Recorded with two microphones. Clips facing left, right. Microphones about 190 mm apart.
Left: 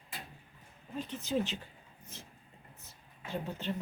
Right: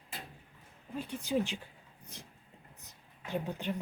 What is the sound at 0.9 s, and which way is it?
Speech, 10° right (ahead or behind).